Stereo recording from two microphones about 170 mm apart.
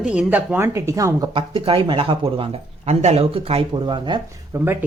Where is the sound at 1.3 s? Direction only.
30° right (ahead or behind).